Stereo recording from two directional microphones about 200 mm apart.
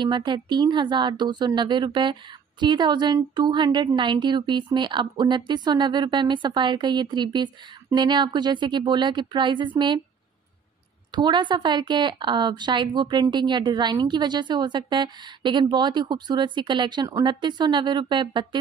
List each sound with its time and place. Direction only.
0.0 s a woman's voice: 20° right (ahead or behind)
11.1 s a woman's voice: 25° right (ahead or behind)